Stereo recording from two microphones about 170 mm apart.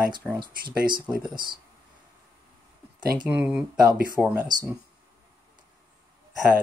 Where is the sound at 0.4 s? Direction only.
25° right (ahead or behind).